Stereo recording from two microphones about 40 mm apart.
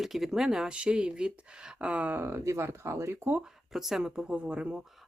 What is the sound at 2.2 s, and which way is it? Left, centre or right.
Speech, right.